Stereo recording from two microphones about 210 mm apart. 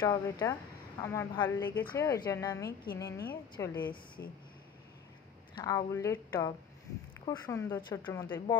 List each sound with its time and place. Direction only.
0.0 s a woman's voice: 20° left (ahead or behind)
5.6 s speech: 15° left (ahead or behind)